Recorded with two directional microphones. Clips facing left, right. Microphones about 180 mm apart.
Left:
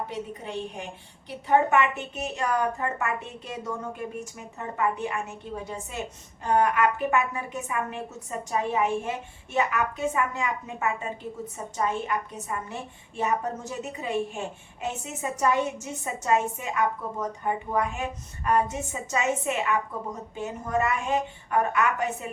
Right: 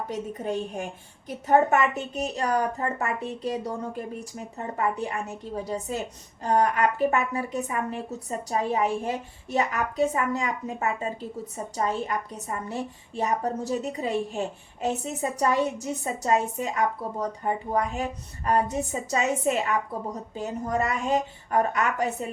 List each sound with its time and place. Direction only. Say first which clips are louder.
0.1 s a woman's voice: right 4 dB; 45° right (ahead or behind)